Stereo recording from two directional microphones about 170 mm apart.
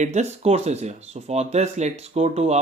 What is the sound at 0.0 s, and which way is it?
Speech, 40° right (ahead or behind).